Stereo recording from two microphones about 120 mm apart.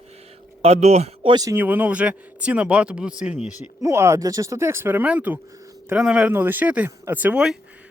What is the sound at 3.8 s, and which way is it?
Speech, 25° right (ahead or behind).